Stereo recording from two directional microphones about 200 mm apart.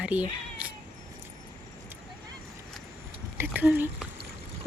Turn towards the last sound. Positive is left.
turn(degrees=-10)  # may be behind; listen again after turning